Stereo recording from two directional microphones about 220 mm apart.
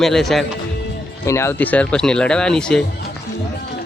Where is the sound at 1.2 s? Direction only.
10° left (ahead or behind).